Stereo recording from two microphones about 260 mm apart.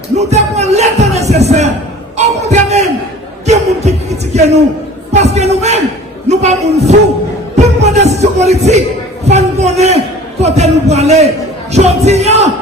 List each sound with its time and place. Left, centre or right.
0.2 s music: right
1.3 s a sound: right
2.1 s music: right
5.1 s speech: right
7.5 s music: right
9.2 s speech: right